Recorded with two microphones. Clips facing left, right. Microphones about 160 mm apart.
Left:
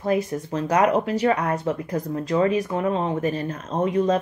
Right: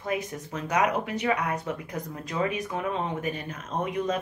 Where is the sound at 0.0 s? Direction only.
35° left (ahead or behind).